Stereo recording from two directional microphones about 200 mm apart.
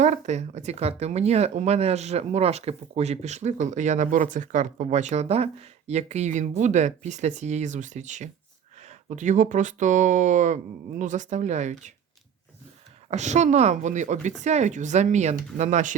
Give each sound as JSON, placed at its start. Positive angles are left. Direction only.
{"t": 0.0, "sound": "speech", "side_deg": -35}
{"t": 13.1, "sound": "speech", "side_deg": -35}